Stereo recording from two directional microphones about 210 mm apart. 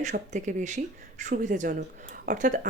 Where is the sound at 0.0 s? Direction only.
35° right (ahead or behind).